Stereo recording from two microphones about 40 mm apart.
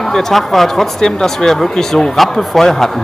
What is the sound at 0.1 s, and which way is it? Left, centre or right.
Speech, centre.